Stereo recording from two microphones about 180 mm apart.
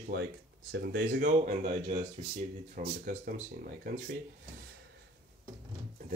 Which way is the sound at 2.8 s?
45° right (ahead or behind).